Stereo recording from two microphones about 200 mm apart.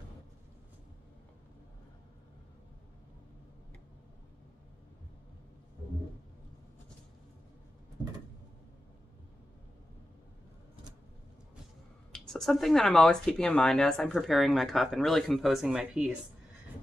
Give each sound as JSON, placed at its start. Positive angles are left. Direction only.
{"t": 12.1, "sound": "speech", "side_deg": 5}